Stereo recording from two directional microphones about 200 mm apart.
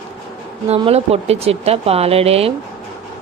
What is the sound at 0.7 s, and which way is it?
Speech, 30° right (ahead or behind).